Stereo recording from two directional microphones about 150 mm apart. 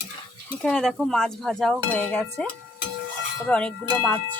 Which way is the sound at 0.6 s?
5° left (ahead or behind).